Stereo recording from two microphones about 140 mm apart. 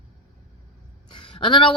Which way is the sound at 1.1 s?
35° left (ahead or behind).